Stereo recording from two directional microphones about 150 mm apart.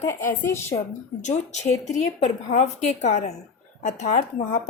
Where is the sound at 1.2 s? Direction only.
50° left (ahead or behind).